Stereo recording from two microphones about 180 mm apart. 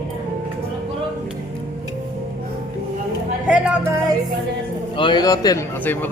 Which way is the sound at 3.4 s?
5° right (ahead or behind).